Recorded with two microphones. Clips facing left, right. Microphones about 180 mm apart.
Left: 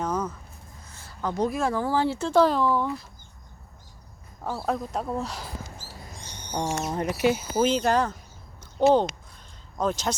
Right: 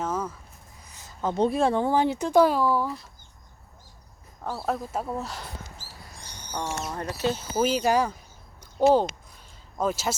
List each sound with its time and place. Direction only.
0.0 s a sound: 5° right (ahead or behind)
0.9 s speech: 20° right (ahead or behind); by 3.1 s centre (ahead or behind)
4.4 s speech: centre (ahead or behind)
6.5 s speech: 20° left (ahead or behind)
7.5 s speech: 5° right (ahead or behind)
9.7 s speech: 5° right (ahead or behind)